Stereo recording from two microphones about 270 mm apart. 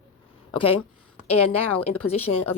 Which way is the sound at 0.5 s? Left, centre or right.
Left.